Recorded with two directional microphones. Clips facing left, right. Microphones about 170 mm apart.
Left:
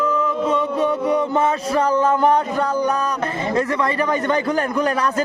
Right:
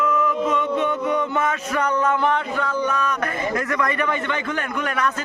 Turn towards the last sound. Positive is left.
turn(degrees=35)  # may be behind; listen again after turning